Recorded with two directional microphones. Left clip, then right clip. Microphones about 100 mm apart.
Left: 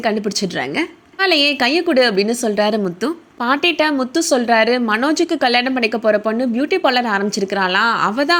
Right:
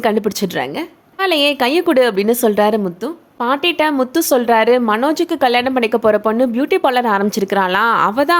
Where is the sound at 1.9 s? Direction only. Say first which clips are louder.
Right 2 dB; 45° right (ahead or behind).